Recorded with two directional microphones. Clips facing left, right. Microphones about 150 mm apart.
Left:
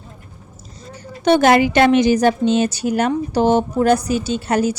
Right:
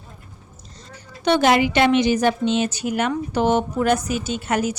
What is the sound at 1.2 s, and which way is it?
A woman's voice, 50° left (ahead or behind).